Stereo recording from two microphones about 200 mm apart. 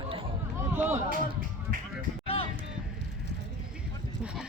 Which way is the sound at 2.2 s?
25° left (ahead or behind).